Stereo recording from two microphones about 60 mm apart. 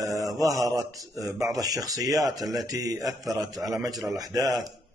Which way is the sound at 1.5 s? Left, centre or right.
Right.